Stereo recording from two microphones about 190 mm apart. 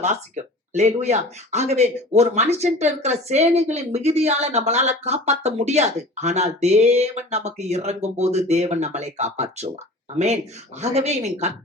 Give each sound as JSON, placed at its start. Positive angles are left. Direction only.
{"t": 0.7, "sound": "speech", "side_deg": -35}